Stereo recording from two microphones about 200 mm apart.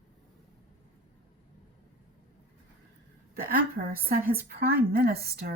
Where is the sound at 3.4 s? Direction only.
50° right (ahead or behind).